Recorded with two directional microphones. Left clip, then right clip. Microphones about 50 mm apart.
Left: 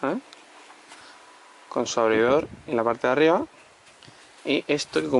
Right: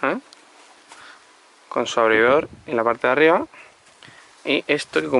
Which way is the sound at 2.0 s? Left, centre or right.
Right.